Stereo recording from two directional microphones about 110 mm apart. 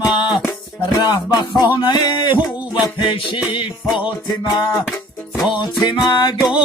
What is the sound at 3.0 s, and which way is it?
Music, 50° left (ahead or behind).